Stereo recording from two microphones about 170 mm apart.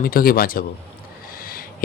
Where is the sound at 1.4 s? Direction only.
60° left (ahead or behind).